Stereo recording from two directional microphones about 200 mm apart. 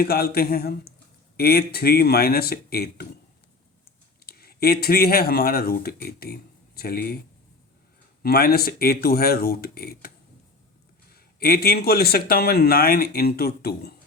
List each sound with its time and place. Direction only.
0.0 s a man's voice: 50° left (ahead or behind)
4.3 s speech: 50° left (ahead or behind)
8.2 s a man's voice: 50° left (ahead or behind)
11.1 s a man's voice: 50° left (ahead or behind)